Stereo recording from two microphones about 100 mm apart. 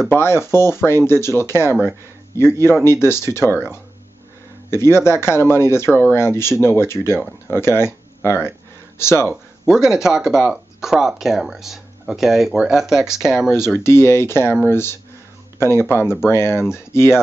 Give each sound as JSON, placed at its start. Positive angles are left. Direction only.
{"t": 0.1, "sound": "speech", "side_deg": 25}
{"t": 4.6, "sound": "speech", "side_deg": 25}
{"t": 9.3, "sound": "speech", "side_deg": -5}
{"t": 13.8, "sound": "speech", "side_deg": 25}
{"t": 16.3, "sound": "speech", "side_deg": 25}